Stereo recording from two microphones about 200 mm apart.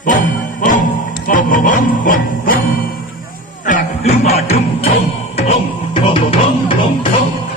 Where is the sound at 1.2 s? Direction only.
40° left (ahead or behind).